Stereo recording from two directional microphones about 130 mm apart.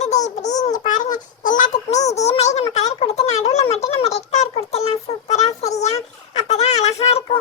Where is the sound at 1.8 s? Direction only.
55° left (ahead or behind).